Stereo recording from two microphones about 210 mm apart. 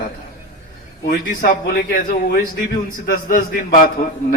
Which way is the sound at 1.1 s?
40° left (ahead or behind).